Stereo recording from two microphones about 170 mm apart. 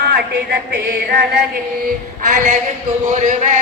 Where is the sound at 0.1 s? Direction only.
70° right (ahead or behind).